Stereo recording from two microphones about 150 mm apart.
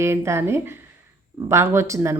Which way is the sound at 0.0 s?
20° right (ahead or behind).